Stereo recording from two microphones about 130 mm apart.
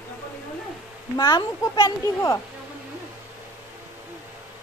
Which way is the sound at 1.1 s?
30° left (ahead or behind).